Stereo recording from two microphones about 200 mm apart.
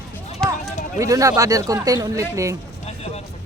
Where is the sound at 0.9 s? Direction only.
15° right (ahead or behind).